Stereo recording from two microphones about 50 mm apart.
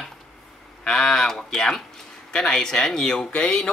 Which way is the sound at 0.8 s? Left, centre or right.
Centre.